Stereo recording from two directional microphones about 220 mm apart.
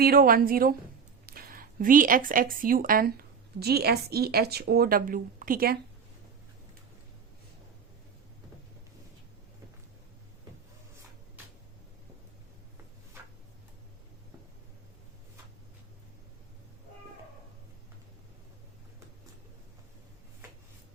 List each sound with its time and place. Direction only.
0.0 s a woman's voice: 40° right (ahead or behind)